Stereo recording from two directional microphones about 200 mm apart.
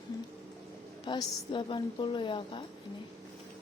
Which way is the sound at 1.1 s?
25° left (ahead or behind).